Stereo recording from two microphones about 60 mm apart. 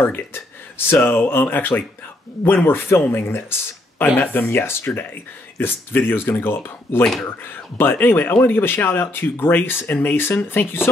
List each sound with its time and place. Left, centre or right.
0.0 s speech: left
7.0 s speech: centre
7.2 s speech: left